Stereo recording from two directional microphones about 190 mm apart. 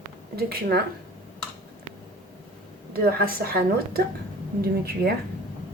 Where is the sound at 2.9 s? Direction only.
55° right (ahead or behind).